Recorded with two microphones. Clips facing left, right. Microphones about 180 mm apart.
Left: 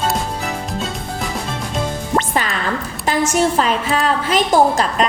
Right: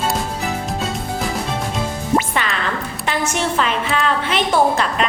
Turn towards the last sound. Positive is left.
turn(degrees=40)  # may be behind; listen again after turning